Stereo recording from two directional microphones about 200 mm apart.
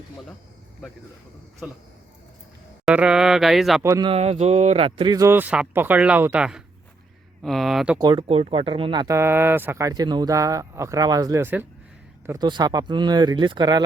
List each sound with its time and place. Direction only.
1.6 s speech: 5° right (ahead or behind)
2.8 s speech: 5° right (ahead or behind)
3.8 s speech: 15° right (ahead or behind)
4.1 s speech: 30° right (ahead or behind); by 7.9 s centre (ahead or behind)
8.0 s speech: 25° right (ahead or behind)